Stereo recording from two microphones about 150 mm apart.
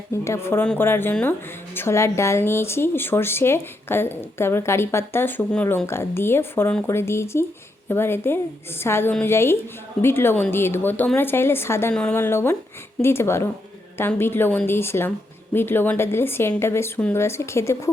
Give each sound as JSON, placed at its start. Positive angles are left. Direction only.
{"t": 0.3, "sound": "a woman's voice", "side_deg": 15}